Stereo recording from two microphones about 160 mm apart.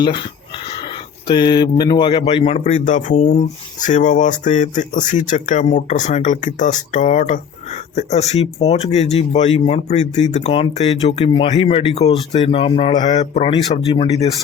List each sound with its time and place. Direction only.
0.0 s speech: 30° left (ahead or behind)
2.6 s speech: 50° left (ahead or behind)